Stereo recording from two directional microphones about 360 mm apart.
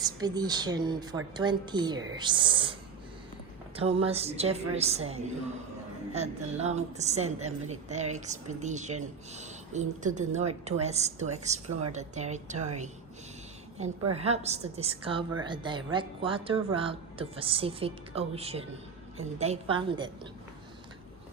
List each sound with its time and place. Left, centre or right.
0.0 s speech: centre
3.8 s speech: centre
14.1 s speech: centre